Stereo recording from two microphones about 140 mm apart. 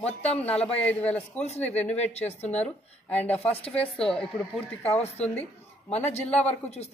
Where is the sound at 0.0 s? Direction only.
45° left (ahead or behind).